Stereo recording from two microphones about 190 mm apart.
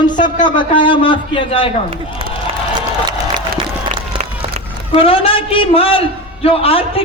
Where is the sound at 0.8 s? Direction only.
25° left (ahead or behind).